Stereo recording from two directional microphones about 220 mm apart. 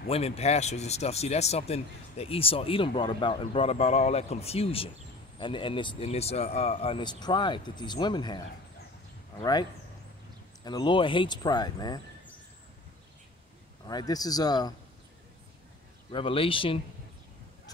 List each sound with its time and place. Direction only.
0.1 s speech: 25° left (ahead or behind)
9.4 s speech: 20° left (ahead or behind)
13.8 s speech: 15° left (ahead or behind)
16.1 s speech: 25° left (ahead or behind)